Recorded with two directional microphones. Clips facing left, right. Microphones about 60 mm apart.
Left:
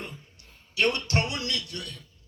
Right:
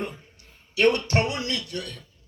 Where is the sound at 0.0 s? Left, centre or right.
Right.